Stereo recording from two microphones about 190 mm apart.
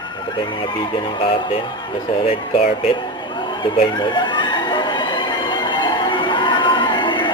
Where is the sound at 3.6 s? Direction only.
25° left (ahead or behind).